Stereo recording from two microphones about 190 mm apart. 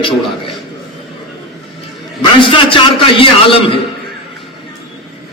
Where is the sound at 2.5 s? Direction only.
25° left (ahead or behind).